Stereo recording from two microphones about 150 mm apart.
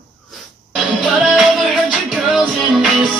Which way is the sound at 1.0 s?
Centre (ahead or behind).